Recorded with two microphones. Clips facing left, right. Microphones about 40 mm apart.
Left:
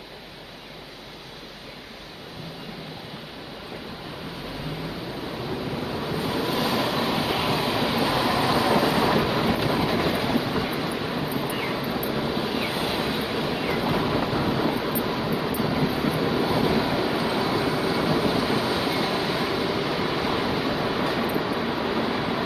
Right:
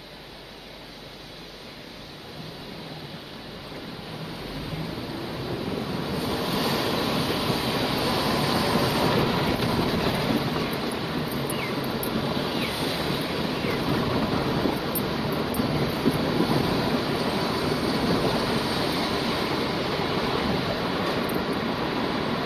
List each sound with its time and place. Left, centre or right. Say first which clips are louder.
5.7 s vehicle: left 1 dB; centre
6.1 s train: left 2 dB; centre
10.0 s a sound: left 1 dB; centre
12.7 s vehicle: left 2 dB; left